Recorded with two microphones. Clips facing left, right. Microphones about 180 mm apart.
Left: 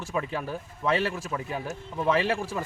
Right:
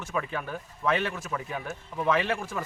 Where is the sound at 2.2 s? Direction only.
10° left (ahead or behind).